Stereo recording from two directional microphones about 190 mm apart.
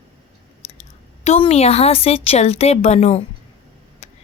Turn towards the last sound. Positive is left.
turn(degrees=35)  # may be behind; listen again after turning